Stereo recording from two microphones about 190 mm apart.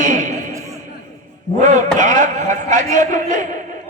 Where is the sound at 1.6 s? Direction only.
40° right (ahead or behind).